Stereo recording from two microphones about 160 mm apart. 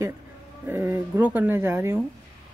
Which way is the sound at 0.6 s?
15° right (ahead or behind).